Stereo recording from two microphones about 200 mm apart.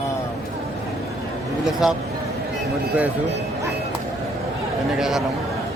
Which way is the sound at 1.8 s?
5° right (ahead or behind).